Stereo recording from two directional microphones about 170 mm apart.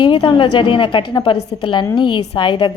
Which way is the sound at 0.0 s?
30° left (ahead or behind).